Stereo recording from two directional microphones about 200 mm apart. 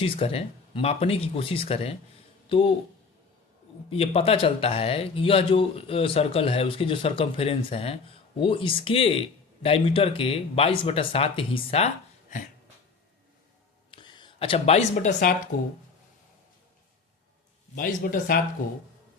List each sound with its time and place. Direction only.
0.0 s speech: 30° left (ahead or behind)
3.8 s speech: 30° left (ahead or behind)
13.9 s speech: 25° left (ahead or behind); by 15.4 s 40° left (ahead or behind)
17.7 s speech: 45° left (ahead or behind)